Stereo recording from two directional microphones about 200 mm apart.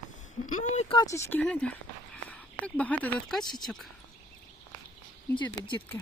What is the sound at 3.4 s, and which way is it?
Speech, 20° left (ahead or behind).